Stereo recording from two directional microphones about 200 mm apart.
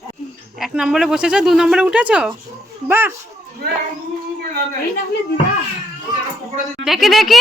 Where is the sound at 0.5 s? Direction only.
Centre (ahead or behind).